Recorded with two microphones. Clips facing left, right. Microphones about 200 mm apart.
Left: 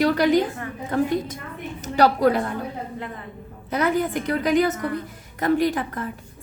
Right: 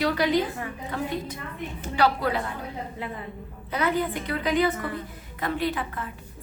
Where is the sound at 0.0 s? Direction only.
45° left (ahead or behind).